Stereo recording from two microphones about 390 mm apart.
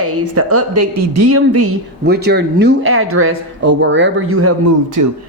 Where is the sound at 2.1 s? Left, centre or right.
Right.